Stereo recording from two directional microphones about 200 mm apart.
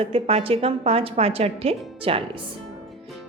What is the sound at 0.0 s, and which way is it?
A woman's voice, 30° right (ahead or behind).